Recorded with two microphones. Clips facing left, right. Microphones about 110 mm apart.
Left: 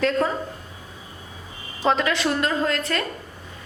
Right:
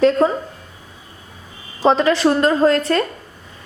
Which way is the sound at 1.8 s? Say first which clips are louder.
Right 7 dB; 35° right (ahead or behind).